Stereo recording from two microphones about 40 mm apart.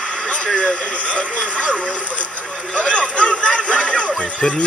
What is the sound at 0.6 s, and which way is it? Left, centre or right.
Speech, left.